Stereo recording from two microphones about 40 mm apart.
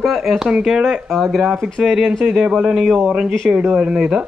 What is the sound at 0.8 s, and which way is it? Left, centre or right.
Speech, centre.